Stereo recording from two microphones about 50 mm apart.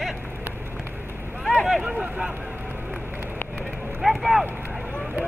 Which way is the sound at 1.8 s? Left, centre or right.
Centre.